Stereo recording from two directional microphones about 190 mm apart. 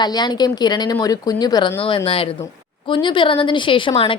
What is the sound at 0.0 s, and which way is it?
A woman's voice, 20° left (ahead or behind).